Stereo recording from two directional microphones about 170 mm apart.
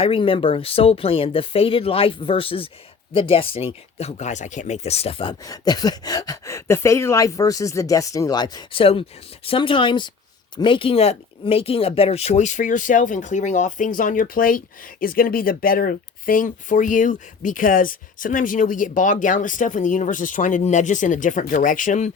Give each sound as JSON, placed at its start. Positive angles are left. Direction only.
{"t": 0.0, "sound": "speech", "side_deg": 35}